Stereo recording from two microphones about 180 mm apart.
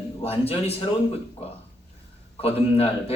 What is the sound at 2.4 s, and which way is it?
Speech, 35° left (ahead or behind).